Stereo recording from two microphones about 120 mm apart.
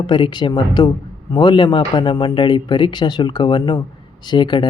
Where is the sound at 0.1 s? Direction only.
40° left (ahead or behind).